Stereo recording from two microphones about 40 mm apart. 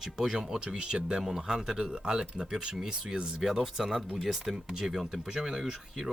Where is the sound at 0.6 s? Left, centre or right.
Right.